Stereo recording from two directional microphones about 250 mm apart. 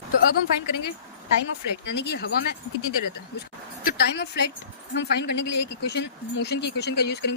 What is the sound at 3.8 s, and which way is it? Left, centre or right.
Speech, left.